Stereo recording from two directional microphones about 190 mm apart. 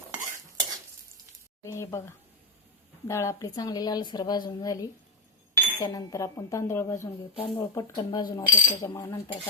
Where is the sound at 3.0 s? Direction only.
15° left (ahead or behind).